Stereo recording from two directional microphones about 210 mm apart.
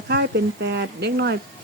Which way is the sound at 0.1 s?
50° right (ahead or behind).